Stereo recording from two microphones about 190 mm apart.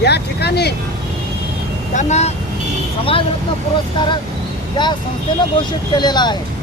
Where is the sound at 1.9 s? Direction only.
35° left (ahead or behind).